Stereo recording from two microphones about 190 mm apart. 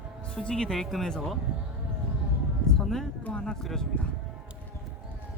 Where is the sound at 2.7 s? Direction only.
Centre (ahead or behind).